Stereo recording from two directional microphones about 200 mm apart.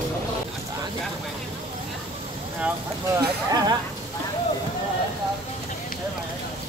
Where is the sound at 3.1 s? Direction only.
20° right (ahead or behind).